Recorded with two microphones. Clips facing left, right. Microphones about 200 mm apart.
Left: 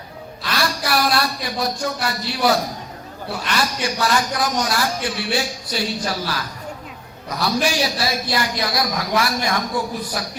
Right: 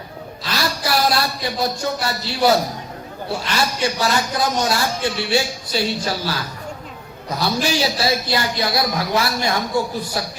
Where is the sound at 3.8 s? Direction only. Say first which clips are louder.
Right 1 dB; 25° right (ahead or behind).